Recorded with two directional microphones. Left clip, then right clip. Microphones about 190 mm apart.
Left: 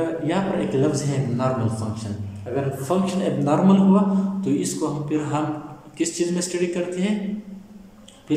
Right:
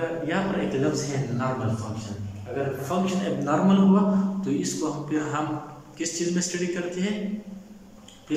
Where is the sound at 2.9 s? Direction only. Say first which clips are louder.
Left 4 dB; 25° left (ahead or behind).